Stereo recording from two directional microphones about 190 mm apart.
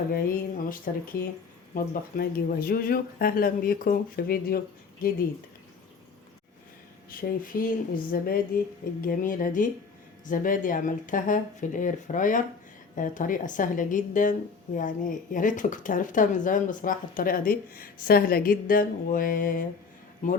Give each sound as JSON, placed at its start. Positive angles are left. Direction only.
{"t": 0.1, "sound": "speech", "side_deg": 45}
{"t": 7.1, "sound": "speech", "side_deg": 50}